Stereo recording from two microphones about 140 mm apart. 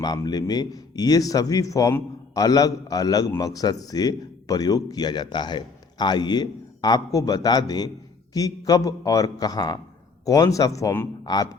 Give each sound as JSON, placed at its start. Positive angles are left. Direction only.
{"t": 0.0, "sound": "a man's voice", "side_deg": 30}